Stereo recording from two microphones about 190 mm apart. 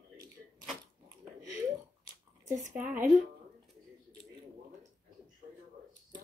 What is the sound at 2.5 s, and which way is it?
Speech, 40° right (ahead or behind).